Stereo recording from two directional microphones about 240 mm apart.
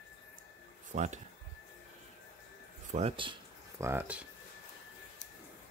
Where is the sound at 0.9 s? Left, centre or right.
Right.